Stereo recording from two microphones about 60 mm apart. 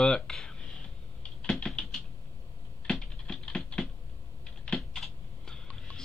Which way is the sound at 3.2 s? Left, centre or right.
Centre.